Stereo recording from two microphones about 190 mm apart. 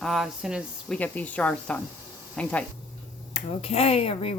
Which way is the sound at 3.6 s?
30° left (ahead or behind).